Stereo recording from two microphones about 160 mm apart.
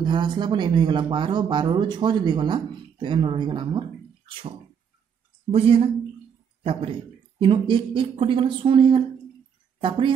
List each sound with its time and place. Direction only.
0.0 s speech: 30° right (ahead or behind)